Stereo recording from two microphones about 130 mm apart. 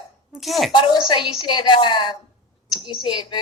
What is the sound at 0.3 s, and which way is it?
Speech, centre (ahead or behind).